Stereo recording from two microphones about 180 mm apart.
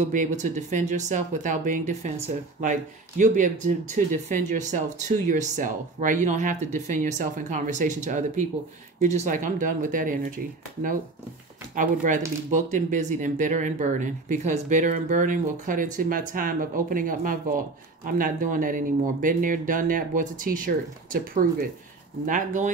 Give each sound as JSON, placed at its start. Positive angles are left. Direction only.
{"t": 0.0, "sound": "speech", "side_deg": -45}